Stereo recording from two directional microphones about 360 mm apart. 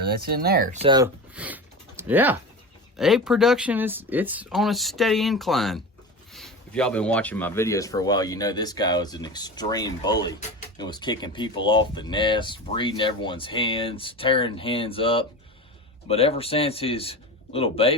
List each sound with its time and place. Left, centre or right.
0.0 s speech: right; by 17.9 s centre